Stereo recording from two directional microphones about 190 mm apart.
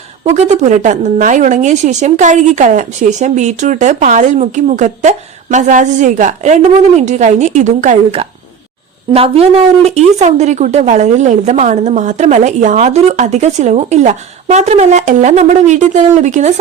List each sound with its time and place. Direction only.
0.3 s a woman's voice: 40° right (ahead or behind)